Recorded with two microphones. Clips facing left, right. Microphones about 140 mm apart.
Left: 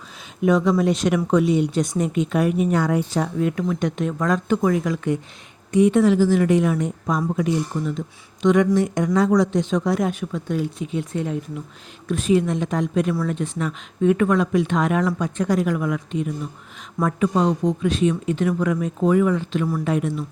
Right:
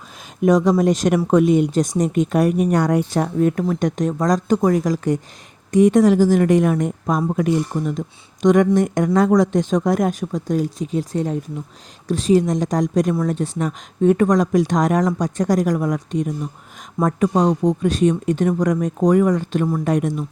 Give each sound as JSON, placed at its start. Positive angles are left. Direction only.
{"t": 0.4, "sound": "speech", "side_deg": -45}